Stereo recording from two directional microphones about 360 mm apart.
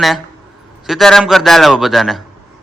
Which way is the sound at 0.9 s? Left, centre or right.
Centre.